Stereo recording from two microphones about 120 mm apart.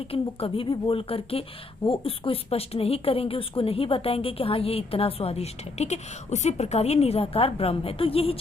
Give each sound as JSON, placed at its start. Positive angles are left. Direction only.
{"t": 0.1, "sound": "a woman's voice", "side_deg": 50}